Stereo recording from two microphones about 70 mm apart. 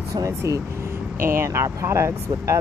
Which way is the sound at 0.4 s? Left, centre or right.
Right.